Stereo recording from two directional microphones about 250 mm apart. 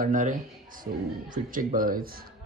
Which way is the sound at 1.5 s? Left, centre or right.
Right.